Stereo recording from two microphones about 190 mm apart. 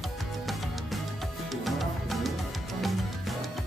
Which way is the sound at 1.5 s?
Centre (ahead or behind).